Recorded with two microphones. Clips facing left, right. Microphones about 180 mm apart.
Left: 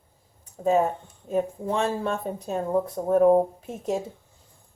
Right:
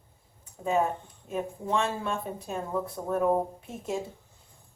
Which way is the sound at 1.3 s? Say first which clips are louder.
Left 5 dB; 40° left (ahead or behind).